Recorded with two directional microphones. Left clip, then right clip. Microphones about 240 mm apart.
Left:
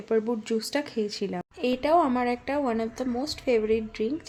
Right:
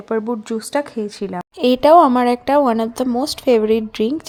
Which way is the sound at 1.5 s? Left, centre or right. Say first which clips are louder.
Right 13 dB; right.